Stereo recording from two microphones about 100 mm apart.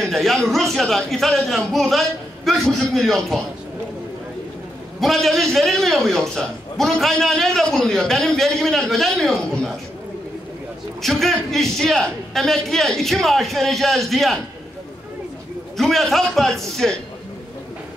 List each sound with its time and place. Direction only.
0.0 s a man's voice: 5° left (ahead or behind)
5.0 s a man's voice: centre (ahead or behind)
11.0 s a man's voice: centre (ahead or behind)
15.8 s a man's voice: centre (ahead or behind)